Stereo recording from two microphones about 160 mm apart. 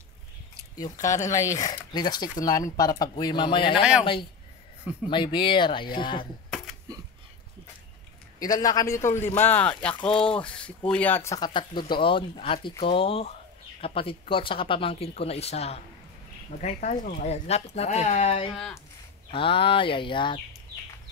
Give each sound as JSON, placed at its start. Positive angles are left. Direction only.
{"t": 0.7, "sound": "speech", "side_deg": 25}
{"t": 8.4, "sound": "speech", "side_deg": 25}
{"t": 18.5, "sound": "speech", "side_deg": 0}
{"t": 19.3, "sound": "speech", "side_deg": 35}